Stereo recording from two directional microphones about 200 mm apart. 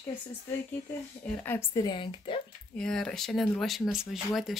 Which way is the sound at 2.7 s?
5° left (ahead or behind).